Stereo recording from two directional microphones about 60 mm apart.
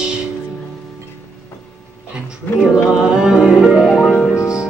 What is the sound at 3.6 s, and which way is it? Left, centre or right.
Music, centre.